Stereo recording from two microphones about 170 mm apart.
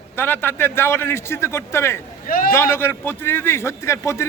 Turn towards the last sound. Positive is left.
turn(degrees=15)  # may be behind; listen again after turning